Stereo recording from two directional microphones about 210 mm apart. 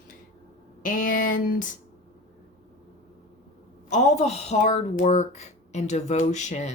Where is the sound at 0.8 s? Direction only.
40° left (ahead or behind).